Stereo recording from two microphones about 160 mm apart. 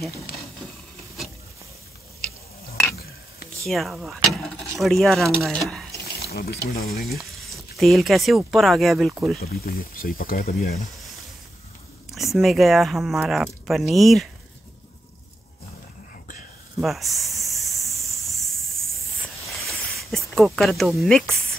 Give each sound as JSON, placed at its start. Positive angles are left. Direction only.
{"t": 3.6, "sound": "speech", "side_deg": 0}
{"t": 6.1, "sound": "speech", "side_deg": 75}
{"t": 7.2, "sound": "speech", "side_deg": 0}
{"t": 9.4, "sound": "speech", "side_deg": 70}
{"t": 12.1, "sound": "speech", "side_deg": 0}
{"t": 16.8, "sound": "speech", "side_deg": 0}
{"t": 17.6, "sound": "a sound", "side_deg": 0}
{"t": 19.6, "sound": "snake", "side_deg": 0}